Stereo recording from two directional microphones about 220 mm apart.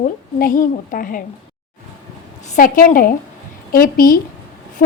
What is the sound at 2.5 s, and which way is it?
A woman's voice, 35° left (ahead or behind).